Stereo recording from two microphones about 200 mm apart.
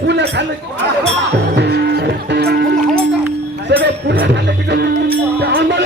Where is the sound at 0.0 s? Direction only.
55° right (ahead or behind).